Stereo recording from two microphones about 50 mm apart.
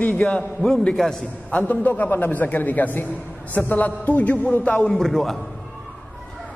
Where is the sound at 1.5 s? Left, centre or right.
Left.